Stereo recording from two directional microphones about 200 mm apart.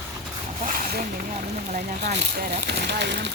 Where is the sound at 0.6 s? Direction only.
45° right (ahead or behind).